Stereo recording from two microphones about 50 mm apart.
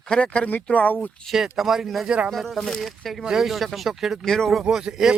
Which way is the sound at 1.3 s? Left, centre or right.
Centre.